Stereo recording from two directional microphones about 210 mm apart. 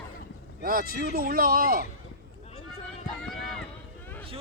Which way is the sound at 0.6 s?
45° right (ahead or behind).